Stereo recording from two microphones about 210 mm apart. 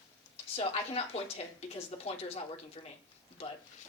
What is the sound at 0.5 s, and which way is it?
Speech, 30° left (ahead or behind).